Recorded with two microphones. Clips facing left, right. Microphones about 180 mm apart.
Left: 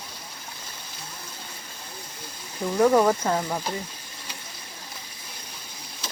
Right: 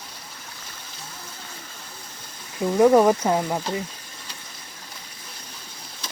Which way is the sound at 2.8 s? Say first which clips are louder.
Right 3 dB; 15° right (ahead or behind).